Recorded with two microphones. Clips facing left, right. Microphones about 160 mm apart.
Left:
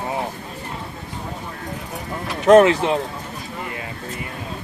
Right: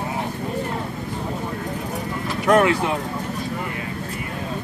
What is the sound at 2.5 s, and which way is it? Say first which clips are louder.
Speech: left 5 dB; 25° left (ahead or behind).